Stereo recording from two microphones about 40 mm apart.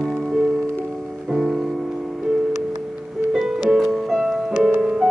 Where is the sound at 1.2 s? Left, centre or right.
Centre.